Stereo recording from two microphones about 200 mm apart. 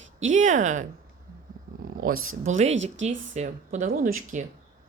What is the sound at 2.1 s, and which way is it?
Speech, 90° right.